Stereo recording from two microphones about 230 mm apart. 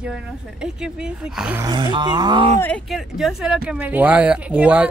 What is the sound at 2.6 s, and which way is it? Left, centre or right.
Speech, centre.